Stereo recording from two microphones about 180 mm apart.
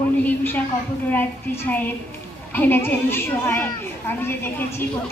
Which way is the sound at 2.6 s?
10° left (ahead or behind).